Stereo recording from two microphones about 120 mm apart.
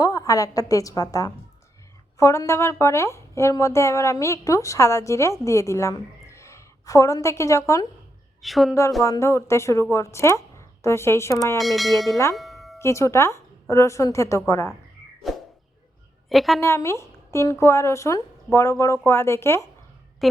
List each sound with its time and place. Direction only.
0.0 s speech: 30° left (ahead or behind)
8.4 s a woman's voice: centre (ahead or behind)
9.0 s speech: 25° left (ahead or behind)
11.6 s speech: centre (ahead or behind)
12.3 s music: centre (ahead or behind)
12.8 s speech: 25° left (ahead or behind)
15.2 s a sound: centre (ahead or behind)
16.3 s speech: centre (ahead or behind)
16.6 s speech: 20° left (ahead or behind)